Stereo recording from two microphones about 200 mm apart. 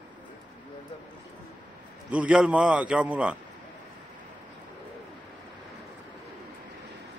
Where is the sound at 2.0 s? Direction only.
5° right (ahead or behind).